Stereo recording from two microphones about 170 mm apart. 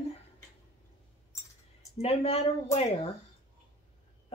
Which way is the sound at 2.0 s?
35° left (ahead or behind).